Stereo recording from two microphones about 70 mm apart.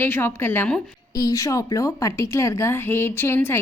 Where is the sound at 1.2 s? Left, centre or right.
Left.